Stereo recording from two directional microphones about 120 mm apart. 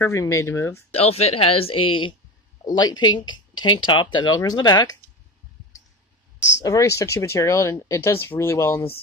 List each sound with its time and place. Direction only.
0.0 s speech: 25° left (ahead or behind)
0.9 s speech: 60° left (ahead or behind); by 4.9 s 35° left (ahead or behind)
6.6 s speech: 30° left (ahead or behind)